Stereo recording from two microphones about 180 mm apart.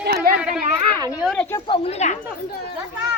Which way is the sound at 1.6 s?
30° left (ahead or behind).